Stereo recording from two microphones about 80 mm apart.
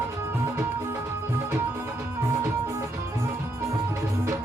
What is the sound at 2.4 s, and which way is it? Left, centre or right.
Music, right.